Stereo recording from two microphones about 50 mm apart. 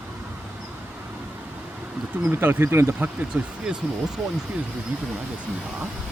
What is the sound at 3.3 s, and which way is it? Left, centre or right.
Speech, right.